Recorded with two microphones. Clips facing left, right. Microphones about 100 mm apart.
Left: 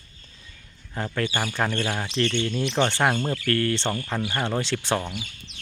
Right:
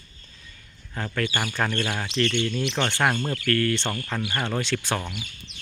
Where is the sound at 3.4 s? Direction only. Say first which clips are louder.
Right 2 dB; 30° left (ahead or behind).